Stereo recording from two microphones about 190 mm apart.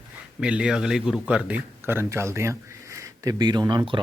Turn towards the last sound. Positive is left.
turn(degrees=-25)  # may be behind; listen again after turning